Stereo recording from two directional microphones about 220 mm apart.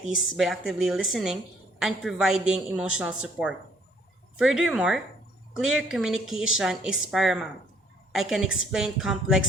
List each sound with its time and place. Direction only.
0.3 s a woman's voice: centre (ahead or behind)